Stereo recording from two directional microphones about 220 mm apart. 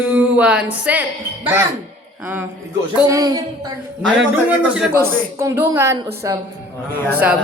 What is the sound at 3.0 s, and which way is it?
Speech, 15° right (ahead or behind).